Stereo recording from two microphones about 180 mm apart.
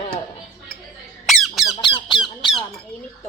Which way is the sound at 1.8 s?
25° left (ahead or behind).